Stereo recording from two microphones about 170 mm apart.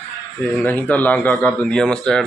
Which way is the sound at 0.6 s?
10° left (ahead or behind).